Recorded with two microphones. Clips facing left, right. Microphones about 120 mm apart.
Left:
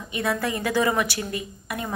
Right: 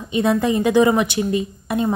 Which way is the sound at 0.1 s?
20° right (ahead or behind).